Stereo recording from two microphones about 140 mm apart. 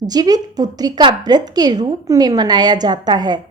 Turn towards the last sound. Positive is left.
turn(degrees=-30)  # may be behind; listen again after turning